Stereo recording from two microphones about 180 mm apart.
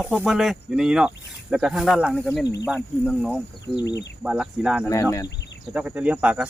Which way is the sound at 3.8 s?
70° left (ahead or behind).